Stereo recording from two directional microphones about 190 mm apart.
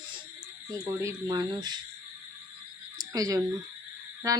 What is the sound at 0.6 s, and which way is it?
Speech, 20° right (ahead or behind).